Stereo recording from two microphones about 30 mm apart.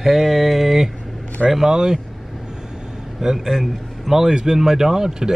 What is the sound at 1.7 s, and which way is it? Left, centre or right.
Speech, right.